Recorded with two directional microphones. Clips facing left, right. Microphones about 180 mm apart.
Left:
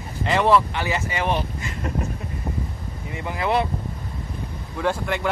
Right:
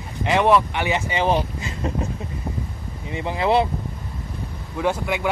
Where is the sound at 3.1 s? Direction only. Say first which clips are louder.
Right 3 dB; 25° right (ahead or behind).